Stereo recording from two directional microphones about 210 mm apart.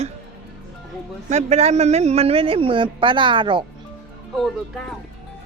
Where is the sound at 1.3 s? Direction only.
35° right (ahead or behind).